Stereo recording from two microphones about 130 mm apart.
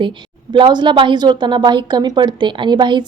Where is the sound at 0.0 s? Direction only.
40° right (ahead or behind).